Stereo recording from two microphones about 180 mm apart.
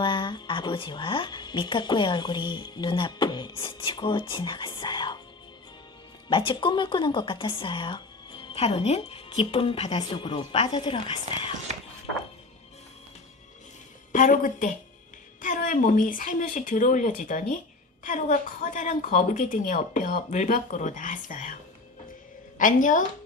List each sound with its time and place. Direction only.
0.0 s speech: 25° left (ahead or behind)
6.2 s speech: 25° left (ahead or behind)
14.1 s a woman's voice: 45° left (ahead or behind)
22.5 s a woman's voice: 45° left (ahead or behind)